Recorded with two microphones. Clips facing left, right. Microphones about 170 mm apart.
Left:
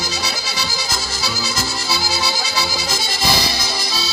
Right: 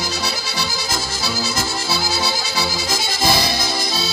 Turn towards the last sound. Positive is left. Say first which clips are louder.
# right 2 dB
turn(degrees=-50)  # may be behind; listen again after turning